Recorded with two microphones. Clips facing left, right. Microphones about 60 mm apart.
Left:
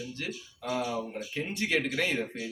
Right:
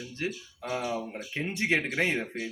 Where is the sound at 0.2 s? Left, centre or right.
Right.